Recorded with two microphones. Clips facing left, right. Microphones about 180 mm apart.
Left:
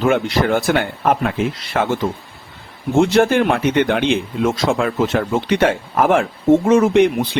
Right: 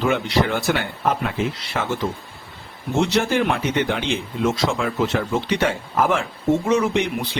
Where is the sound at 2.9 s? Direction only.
50° left (ahead or behind).